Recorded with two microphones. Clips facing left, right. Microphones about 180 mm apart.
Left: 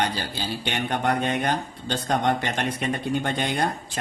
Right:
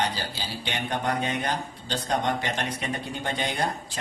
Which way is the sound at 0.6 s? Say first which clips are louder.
Left 3 dB; 60° left (ahead or behind).